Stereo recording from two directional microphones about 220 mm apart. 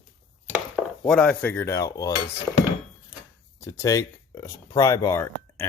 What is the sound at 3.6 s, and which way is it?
Speech, 15° left (ahead or behind).